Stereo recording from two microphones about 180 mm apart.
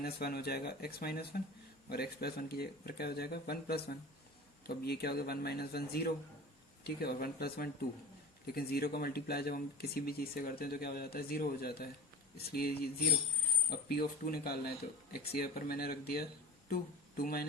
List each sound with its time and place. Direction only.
0.0 s speech: 60° left (ahead or behind)